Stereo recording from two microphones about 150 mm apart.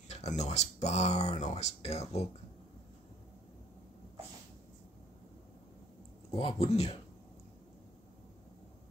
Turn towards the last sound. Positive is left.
turn(degrees=45)  # may be behind; listen again after turning